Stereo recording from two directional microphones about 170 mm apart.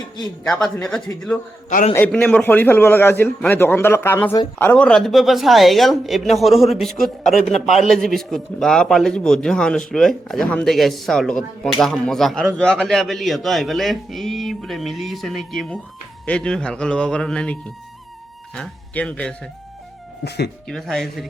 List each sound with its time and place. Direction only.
0.2 s a man's voice: 5° left (ahead or behind)
20.2 s speech: 75° left (ahead or behind)
20.7 s speech: centre (ahead or behind)